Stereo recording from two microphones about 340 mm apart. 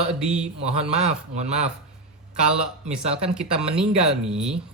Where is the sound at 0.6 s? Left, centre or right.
Centre.